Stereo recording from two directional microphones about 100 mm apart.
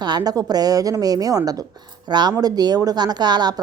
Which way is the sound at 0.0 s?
40° right (ahead or behind).